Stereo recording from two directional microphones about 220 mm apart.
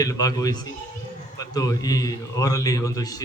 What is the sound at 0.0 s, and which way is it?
Speech, 15° left (ahead or behind).